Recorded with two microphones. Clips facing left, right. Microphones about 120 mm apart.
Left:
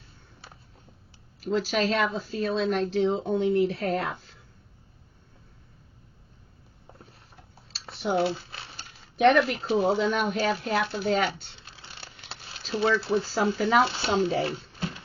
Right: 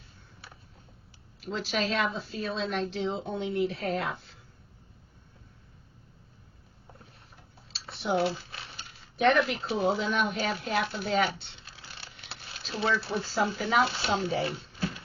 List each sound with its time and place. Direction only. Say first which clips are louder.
1.4 s speech: left 5 dB; 40° left (ahead or behind)
8.0 s speech: left 2 dB; 40° left (ahead or behind)
8.3 s speech: left 3 dB; 30° left (ahead or behind)
12.3 s a sound: left 6 dB; 30° left (ahead or behind)
13.2 s speech: left 4 dB; 35° left (ahead or behind)